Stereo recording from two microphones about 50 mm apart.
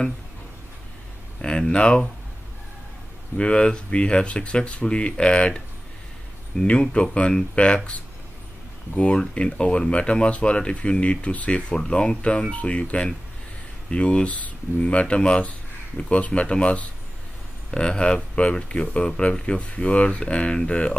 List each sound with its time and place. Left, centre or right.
1.4 s speech: centre
3.3 s speech: left
6.6 s speech: left